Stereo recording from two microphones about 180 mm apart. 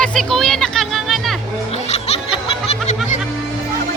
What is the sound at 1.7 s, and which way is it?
Music, 35° left (ahead or behind).